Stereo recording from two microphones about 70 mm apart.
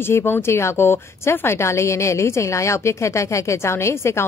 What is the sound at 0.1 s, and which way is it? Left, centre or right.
A woman's voice, left.